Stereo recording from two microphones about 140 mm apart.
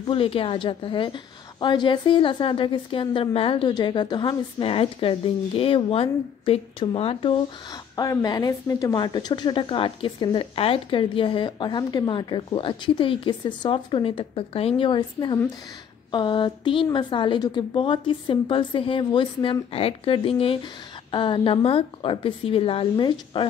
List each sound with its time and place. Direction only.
0.0 s a woman's voice: 40° left (ahead or behind)
7.9 s a woman's voice: 25° left (ahead or behind)